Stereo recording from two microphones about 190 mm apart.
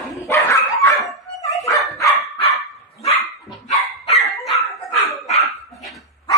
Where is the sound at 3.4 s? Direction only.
Centre (ahead or behind).